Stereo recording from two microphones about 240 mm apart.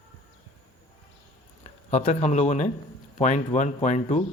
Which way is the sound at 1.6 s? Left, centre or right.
Left.